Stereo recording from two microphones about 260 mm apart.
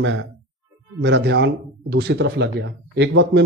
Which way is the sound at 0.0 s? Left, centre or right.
Right.